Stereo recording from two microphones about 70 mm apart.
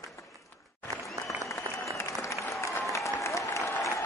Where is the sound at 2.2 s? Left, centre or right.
Left.